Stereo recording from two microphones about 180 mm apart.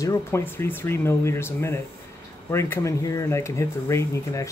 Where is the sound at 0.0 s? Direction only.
15° left (ahead or behind).